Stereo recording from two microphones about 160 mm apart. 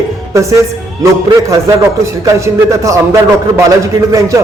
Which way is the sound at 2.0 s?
20° right (ahead or behind).